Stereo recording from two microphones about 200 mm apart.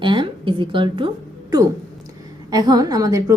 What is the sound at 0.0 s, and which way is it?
A woman's voice, 25° right (ahead or behind).